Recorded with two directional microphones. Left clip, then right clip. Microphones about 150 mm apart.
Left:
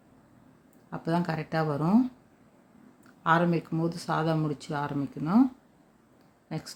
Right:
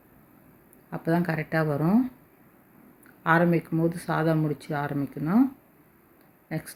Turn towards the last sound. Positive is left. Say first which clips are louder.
# right 3 dB
turn(degrees=10)  # may be behind; listen again after turning